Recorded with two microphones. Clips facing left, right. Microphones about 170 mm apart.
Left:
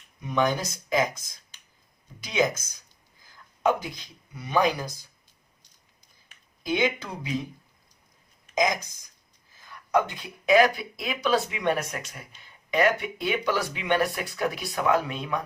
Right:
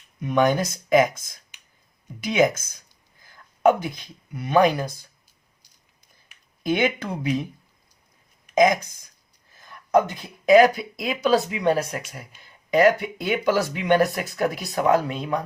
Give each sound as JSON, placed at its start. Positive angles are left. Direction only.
{"t": 0.2, "sound": "speech", "side_deg": -60}
{"t": 6.6, "sound": "speech", "side_deg": -55}
{"t": 8.4, "sound": "speech", "side_deg": -60}
{"t": 9.9, "sound": "speech", "side_deg": -40}